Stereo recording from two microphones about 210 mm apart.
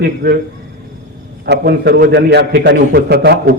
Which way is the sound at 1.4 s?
50° right (ahead or behind).